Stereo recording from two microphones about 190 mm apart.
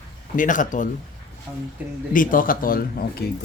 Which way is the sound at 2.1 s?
45° left (ahead or behind).